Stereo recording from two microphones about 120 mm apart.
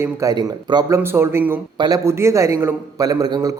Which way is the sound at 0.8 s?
20° right (ahead or behind).